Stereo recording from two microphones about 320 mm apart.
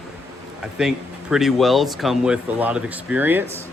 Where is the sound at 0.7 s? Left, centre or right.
Centre.